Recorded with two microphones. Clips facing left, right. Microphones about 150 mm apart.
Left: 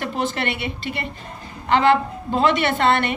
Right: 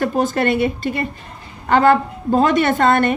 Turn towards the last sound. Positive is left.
turn(degrees=-45)  # may be behind; listen again after turning